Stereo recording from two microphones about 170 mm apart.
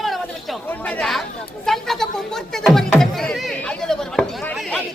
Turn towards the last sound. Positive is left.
turn(degrees=5)  # may be behind; listen again after turning